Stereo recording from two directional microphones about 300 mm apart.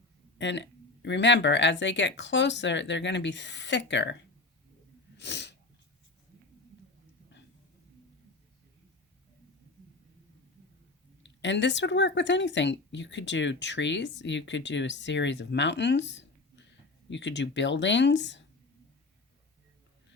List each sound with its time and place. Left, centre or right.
0.3 s speech: left
5.1 s sneeze: left
11.2 s speech: left